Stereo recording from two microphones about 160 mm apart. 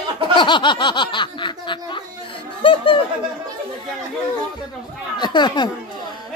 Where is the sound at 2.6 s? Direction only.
30° left (ahead or behind).